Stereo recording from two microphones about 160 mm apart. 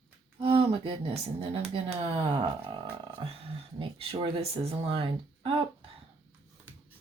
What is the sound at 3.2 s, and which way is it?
Speech, 35° right (ahead or behind).